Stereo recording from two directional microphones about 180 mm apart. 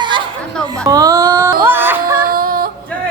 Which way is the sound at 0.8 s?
20° right (ahead or behind).